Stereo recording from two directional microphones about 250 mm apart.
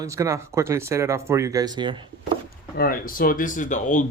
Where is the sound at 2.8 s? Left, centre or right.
Left.